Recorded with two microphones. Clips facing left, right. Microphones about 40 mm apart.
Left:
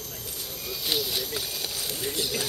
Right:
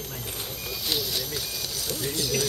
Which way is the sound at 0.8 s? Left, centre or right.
Centre.